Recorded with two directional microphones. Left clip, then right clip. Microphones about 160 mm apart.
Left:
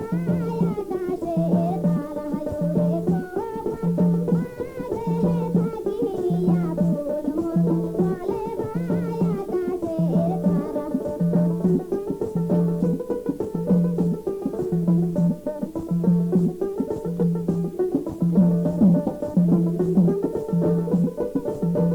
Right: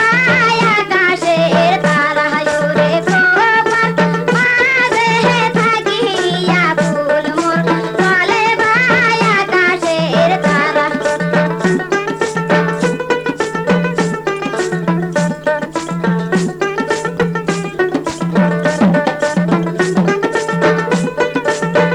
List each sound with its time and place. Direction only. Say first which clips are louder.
0.0 s music: right 19 dB; 5° left (ahead or behind)
6.7 s music: right 12 dB; 25° left (ahead or behind)
7.9 s music: right 14 dB; 10° left (ahead or behind)
12.5 s music: right 11 dB; 5° left (ahead or behind)
18.3 s music: right 10 dB; 25° left (ahead or behind)